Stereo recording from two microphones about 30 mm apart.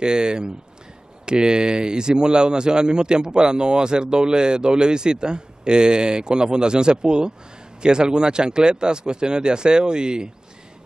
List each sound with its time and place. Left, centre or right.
0.0 s speech: right